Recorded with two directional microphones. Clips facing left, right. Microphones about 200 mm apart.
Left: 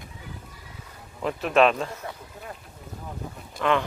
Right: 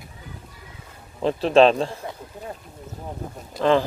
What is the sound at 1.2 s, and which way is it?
Speech, 30° right (ahead or behind).